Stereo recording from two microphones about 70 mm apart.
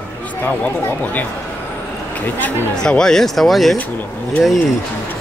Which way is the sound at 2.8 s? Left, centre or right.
Centre.